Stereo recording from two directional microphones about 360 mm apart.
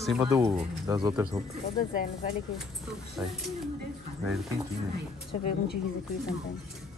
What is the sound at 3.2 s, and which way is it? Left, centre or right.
Speech, centre.